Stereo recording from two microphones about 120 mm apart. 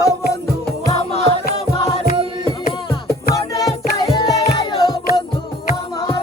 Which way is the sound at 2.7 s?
40° left (ahead or behind).